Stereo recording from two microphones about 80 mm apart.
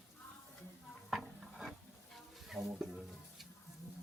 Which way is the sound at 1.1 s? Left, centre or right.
Centre.